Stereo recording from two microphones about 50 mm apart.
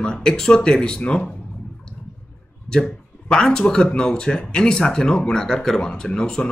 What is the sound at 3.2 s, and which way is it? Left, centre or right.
Speech, centre.